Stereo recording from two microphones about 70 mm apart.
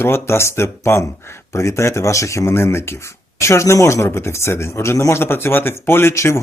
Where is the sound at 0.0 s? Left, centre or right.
Left.